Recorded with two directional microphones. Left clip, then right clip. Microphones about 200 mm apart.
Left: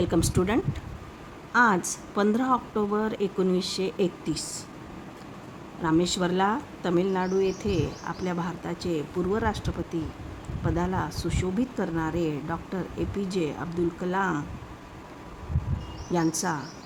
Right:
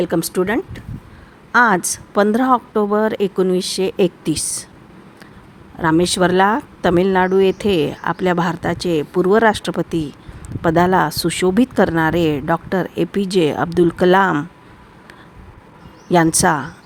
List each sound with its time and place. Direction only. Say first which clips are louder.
0.0 s speech: right 7 dB; 25° right (ahead or behind)
5.8 s speech: right 10 dB; 35° right (ahead or behind)
16.1 s speech: right 13 dB; 45° right (ahead or behind)